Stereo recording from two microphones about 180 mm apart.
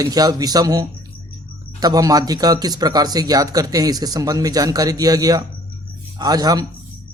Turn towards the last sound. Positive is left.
turn(degrees=-20)  # may be behind; listen again after turning